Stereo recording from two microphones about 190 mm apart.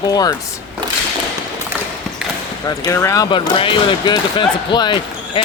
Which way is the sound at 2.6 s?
20° left (ahead or behind).